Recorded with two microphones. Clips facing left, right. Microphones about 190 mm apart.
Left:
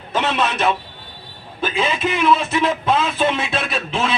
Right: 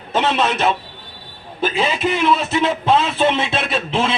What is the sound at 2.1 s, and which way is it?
Speech, 25° right (ahead or behind).